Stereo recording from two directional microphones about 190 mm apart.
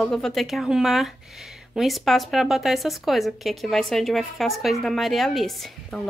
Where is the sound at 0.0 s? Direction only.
5° left (ahead or behind).